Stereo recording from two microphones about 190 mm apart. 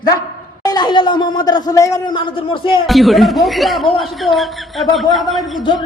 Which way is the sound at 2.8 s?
Centre (ahead or behind).